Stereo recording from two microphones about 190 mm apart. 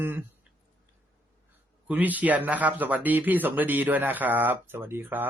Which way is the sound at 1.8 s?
10° right (ahead or behind).